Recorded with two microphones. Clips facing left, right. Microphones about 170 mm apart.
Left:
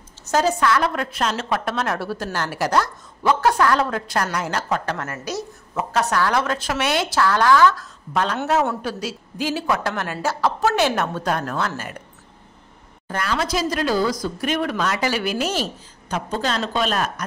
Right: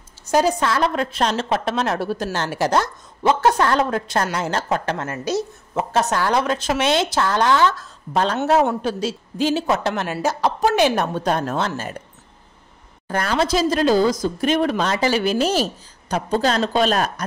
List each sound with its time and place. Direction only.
0.3 s a woman's voice: 15° right (ahead or behind)
0.6 s speech: 25° right (ahead or behind)
13.1 s speech: 40° right (ahead or behind)